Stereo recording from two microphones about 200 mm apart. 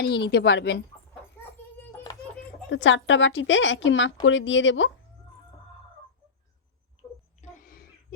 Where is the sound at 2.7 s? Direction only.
65° left (ahead or behind).